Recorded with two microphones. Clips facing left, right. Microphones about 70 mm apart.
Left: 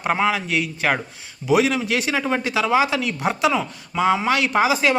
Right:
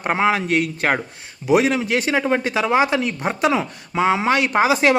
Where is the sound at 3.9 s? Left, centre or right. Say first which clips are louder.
Right 1 dB; right.